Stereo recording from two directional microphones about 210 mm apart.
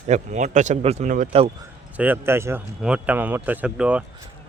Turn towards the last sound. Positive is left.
turn(degrees=-5)  # may be behind; listen again after turning